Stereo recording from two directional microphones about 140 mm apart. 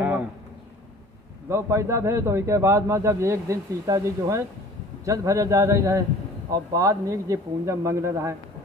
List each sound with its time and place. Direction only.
1.5 s a man's voice: 20° right (ahead or behind)